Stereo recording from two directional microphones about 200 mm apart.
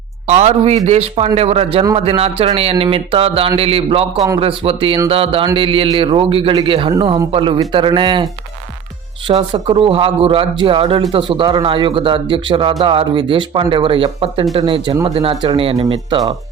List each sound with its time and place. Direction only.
0.3 s speech: 35° right (ahead or behind)